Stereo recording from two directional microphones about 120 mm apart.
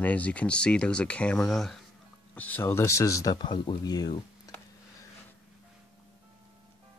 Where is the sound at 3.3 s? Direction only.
40° left (ahead or behind).